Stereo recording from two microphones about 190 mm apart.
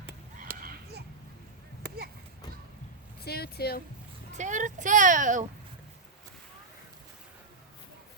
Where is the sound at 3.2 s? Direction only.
55° left (ahead or behind).